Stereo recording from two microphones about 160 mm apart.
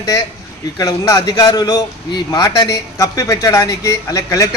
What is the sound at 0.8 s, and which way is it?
A man's voice, 20° left (ahead or behind).